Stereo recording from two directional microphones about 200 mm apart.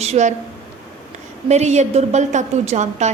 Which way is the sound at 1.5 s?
35° right (ahead or behind).